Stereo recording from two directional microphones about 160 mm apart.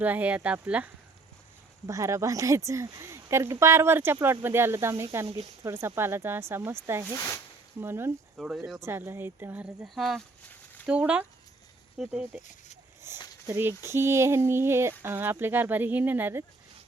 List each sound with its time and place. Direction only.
0.0 s speech: 10° right (ahead or behind)
1.9 s speech: 20° right (ahead or behind)
7.0 s speech: 20° left (ahead or behind)
7.8 s speech: 15° right (ahead or behind)
8.4 s speech: 5° right (ahead or behind)
8.8 s speech: 15° right (ahead or behind)
13.1 s a sound: 15° right (ahead or behind)
13.5 s speech: 15° right (ahead or behind)